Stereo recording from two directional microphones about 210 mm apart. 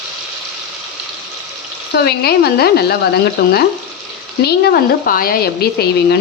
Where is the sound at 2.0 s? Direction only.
50° left (ahead or behind).